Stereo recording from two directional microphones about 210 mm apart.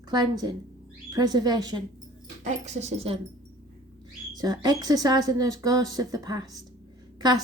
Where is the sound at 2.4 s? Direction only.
35° right (ahead or behind).